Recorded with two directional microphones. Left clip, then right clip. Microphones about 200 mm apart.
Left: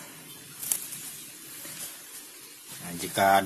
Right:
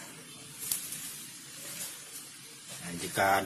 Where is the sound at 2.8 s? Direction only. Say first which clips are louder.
Left 5 dB; 35° left (ahead or behind).